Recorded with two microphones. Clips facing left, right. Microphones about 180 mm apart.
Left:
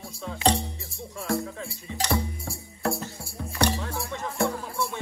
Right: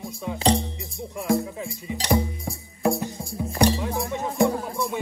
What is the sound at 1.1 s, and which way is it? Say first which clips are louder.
Music: right 5 dB; 15° right (ahead or behind).